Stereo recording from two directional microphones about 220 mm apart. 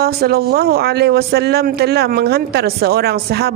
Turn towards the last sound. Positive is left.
turn(degrees=-45)  # may be behind; listen again after turning